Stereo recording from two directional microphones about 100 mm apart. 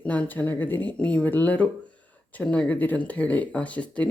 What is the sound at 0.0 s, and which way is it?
Speech, 15° left (ahead or behind).